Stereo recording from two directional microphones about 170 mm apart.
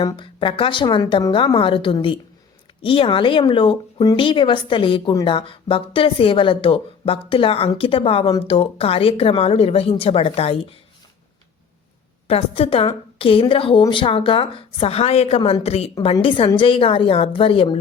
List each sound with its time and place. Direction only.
0.0 s speech: 25° left (ahead or behind)
12.3 s speech: 35° left (ahead or behind)
15.4 s speech: 25° left (ahead or behind)
15.6 s speech: 35° left (ahead or behind)